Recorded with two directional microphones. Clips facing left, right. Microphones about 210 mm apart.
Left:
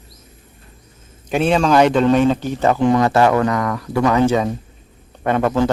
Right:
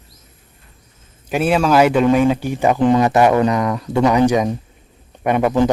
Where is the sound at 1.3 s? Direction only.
5° right (ahead or behind).